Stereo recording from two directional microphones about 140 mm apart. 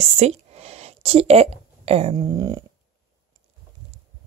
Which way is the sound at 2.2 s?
30° right (ahead or behind).